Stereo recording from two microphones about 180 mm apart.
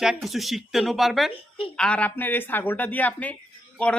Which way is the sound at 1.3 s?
30° left (ahead or behind).